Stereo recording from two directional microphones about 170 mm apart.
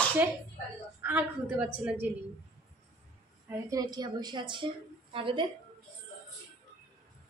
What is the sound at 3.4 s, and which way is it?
A woman's voice, 20° right (ahead or behind).